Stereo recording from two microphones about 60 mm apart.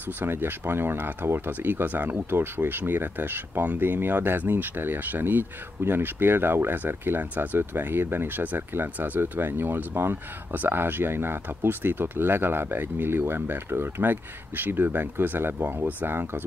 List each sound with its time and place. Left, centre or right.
0.2 s speech: right